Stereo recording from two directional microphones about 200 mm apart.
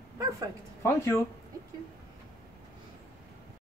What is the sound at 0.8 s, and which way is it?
Speech, 15° left (ahead or behind).